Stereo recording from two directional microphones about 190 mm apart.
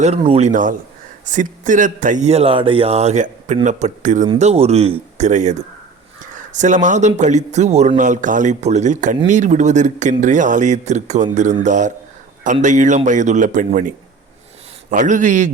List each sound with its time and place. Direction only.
0.2 s a man's voice: 30° right (ahead or behind)
14.8 s a man's voice: 40° right (ahead or behind)